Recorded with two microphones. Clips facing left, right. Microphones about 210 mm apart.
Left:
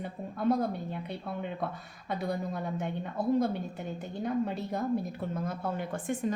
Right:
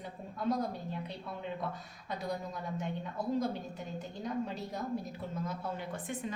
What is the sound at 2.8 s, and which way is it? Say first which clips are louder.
Speech: left 3 dB; 55° left (ahead or behind).